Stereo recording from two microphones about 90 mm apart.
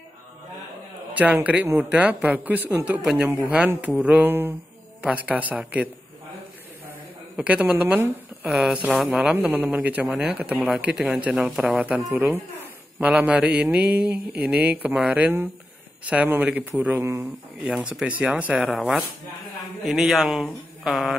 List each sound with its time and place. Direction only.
1.1 s a man's voice: 15° right (ahead or behind)
7.3 s a man's voice: 15° right (ahead or behind)
13.0 s a man's voice: 15° right (ahead or behind)
17.0 s speech: 30° right (ahead or behind)
17.6 s a man's voice: 5° right (ahead or behind)
18.7 s speech: centre (ahead or behind)